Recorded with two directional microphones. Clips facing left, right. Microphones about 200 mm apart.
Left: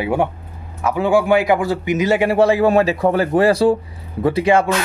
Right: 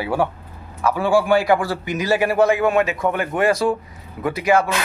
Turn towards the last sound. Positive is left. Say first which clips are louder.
# left 3 dB
turn(degrees=30)  # may be behind; listen again after turning